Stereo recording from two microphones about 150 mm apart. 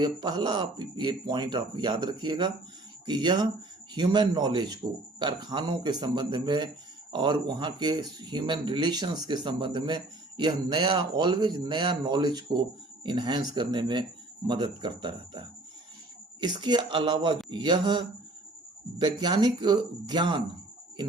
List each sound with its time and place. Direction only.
0.0 s speech: 30° right (ahead or behind)